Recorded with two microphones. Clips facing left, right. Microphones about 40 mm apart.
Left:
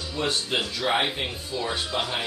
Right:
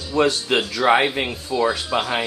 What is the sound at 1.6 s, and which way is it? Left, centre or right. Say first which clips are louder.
Speech: right 7 dB; right.